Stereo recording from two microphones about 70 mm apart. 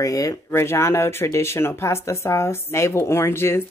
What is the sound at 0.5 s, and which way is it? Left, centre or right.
Speech, left.